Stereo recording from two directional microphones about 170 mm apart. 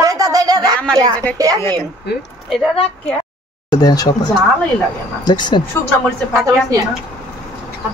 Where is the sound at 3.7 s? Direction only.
25° left (ahead or behind).